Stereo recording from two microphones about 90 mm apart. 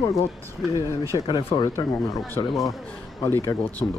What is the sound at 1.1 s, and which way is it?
Speech, 55° left (ahead or behind).